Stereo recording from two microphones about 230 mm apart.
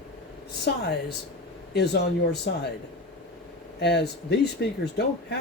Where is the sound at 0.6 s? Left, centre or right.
Left.